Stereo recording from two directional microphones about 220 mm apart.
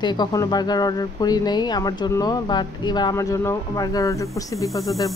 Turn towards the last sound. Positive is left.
turn(degrees=15)  # may be behind; listen again after turning